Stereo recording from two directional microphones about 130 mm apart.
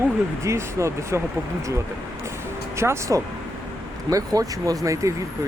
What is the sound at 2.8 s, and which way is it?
Speech, 20° right (ahead or behind).